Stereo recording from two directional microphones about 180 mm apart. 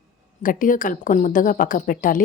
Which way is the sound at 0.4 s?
50° left (ahead or behind).